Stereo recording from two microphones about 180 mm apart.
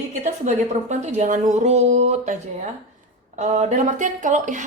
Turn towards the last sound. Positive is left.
turn(degrees=-45)  # may be behind; listen again after turning